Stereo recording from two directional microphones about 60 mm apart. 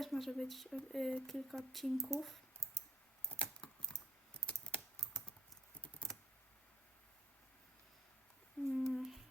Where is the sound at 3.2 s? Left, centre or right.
Right.